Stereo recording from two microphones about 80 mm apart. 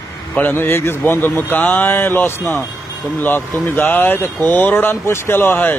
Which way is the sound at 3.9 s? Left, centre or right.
Left.